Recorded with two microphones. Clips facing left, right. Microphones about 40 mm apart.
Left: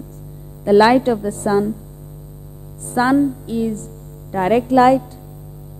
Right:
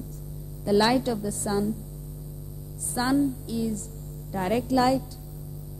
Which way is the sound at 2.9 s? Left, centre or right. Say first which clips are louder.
Left 9 dB; left.